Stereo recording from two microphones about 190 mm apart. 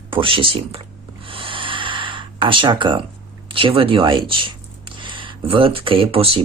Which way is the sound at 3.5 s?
25° right (ahead or behind).